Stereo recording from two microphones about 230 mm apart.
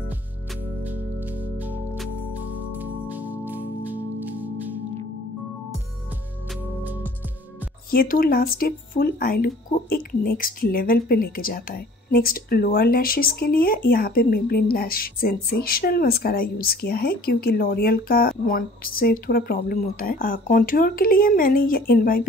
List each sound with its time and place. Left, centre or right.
1.6 s music: centre
7.9 s speech: left